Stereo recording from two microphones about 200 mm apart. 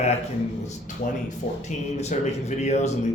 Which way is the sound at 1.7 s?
35° left (ahead or behind).